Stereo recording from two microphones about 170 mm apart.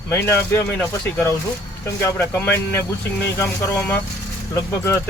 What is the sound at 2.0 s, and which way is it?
Speech, 15° left (ahead or behind).